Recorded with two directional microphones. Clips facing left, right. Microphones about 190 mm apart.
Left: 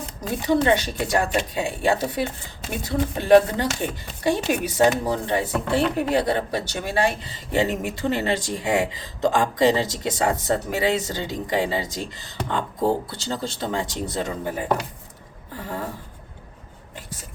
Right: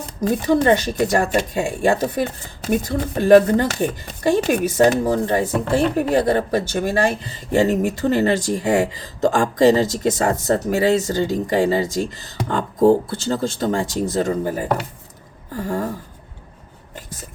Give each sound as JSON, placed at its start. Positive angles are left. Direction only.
{"t": 0.2, "sound": "speech", "side_deg": -45}